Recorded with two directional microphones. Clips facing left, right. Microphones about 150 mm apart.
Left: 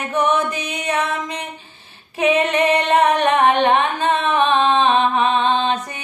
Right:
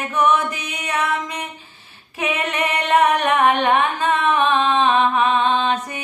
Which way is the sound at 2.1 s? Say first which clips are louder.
Left 7 dB; 30° left (ahead or behind).